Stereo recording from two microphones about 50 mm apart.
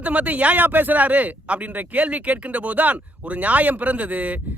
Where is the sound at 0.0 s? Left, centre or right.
Right.